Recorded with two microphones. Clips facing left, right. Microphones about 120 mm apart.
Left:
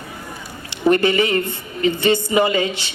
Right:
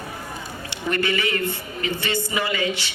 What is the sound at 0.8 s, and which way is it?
A woman's voice, 25° left (ahead or behind).